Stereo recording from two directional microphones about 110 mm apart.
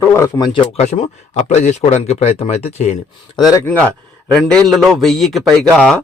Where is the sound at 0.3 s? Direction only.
40° left (ahead or behind).